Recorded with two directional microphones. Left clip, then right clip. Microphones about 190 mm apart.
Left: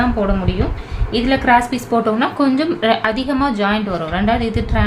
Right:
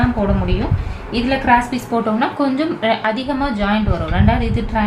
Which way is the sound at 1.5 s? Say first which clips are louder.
Left 1 dB; 40° left (ahead or behind).